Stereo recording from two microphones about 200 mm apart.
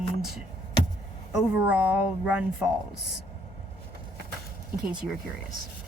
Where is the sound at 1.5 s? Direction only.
5° right (ahead or behind).